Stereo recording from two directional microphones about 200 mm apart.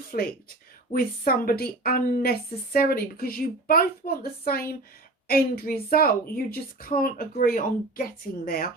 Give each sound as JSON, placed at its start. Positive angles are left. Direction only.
{"t": 0.1, "sound": "a woman's voice", "side_deg": 45}